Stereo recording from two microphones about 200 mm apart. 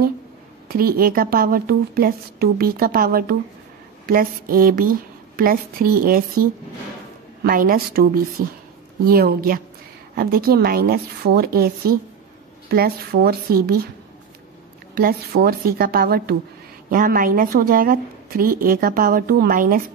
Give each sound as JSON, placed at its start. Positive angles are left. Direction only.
{"t": 0.7, "sound": "a woman's voice", "side_deg": -45}
{"t": 7.4, "sound": "a woman's voice", "side_deg": -45}
{"t": 15.0, "sound": "a woman's voice", "side_deg": -50}